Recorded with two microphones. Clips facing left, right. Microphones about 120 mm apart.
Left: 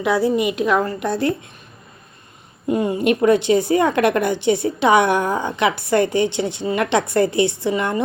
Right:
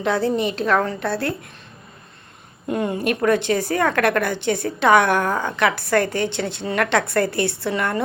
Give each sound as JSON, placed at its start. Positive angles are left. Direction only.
{"t": 0.0, "sound": "a woman's voice", "side_deg": 10}
{"t": 2.6, "sound": "a woman's voice", "side_deg": 10}